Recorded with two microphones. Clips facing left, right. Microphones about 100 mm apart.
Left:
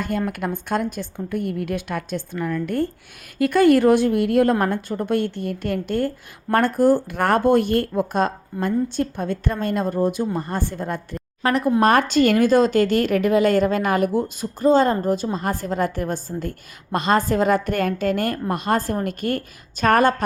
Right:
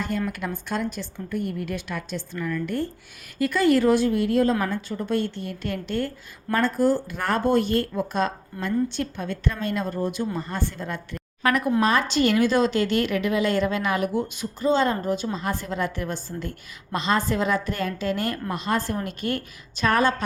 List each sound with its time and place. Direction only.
0.0 s a woman's voice: 50° left (ahead or behind); by 11.7 s 35° left (ahead or behind)
11.8 s speech: 55° left (ahead or behind)